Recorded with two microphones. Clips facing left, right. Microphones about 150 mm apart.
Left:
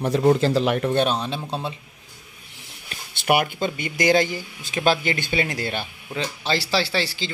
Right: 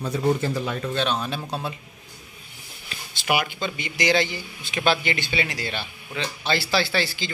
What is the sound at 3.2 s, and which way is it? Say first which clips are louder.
Speech: left 4 dB; 50° left (ahead or behind).